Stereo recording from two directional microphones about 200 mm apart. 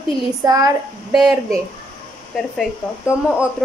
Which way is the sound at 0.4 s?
20° right (ahead or behind).